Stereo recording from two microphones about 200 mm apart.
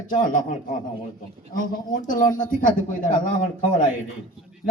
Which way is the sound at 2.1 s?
40° left (ahead or behind).